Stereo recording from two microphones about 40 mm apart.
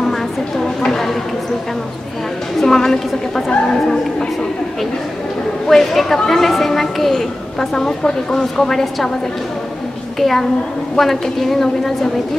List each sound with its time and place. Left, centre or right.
0.7 s a sound: centre
2.6 s speech: centre
5.7 s speech: centre
10.1 s a child's voice: centre